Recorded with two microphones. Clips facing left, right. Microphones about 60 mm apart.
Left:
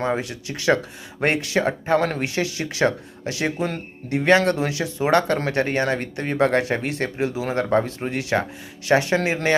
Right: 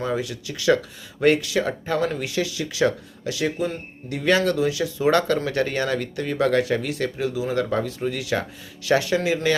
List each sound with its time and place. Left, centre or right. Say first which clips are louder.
0.0 s speech: left 2 dB; left